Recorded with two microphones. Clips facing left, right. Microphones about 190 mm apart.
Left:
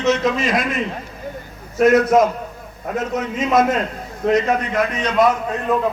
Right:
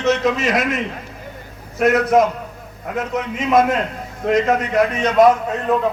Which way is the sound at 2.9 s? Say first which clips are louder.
Left 1 dB; 55° right (ahead or behind).